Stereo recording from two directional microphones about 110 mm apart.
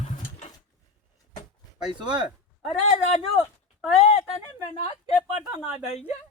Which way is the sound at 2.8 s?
90° left.